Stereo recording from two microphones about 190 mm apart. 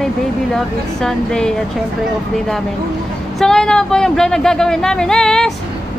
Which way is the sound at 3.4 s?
5° left (ahead or behind).